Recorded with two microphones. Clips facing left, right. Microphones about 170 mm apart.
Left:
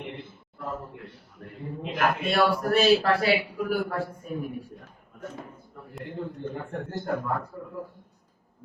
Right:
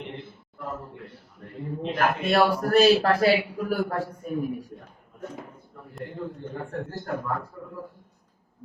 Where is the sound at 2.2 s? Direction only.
40° right (ahead or behind).